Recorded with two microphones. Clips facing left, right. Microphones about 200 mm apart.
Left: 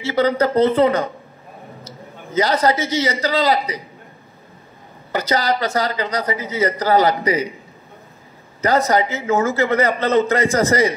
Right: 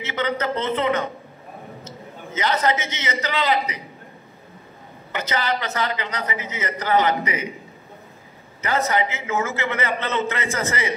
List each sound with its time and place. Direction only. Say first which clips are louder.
0.0 s a man's voice: left 7 dB; 35° left (ahead or behind)
5.1 s a man's voice: left 5 dB; 35° left (ahead or behind)
8.5 s a man's voice: left 6 dB; 35° left (ahead or behind)